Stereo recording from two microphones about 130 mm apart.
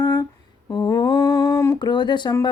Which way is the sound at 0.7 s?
35° left (ahead or behind).